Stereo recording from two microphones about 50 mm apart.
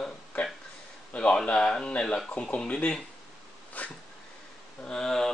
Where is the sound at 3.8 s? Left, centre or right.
Left.